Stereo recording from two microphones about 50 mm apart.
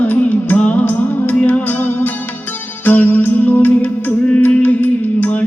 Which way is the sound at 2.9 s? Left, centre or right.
Left.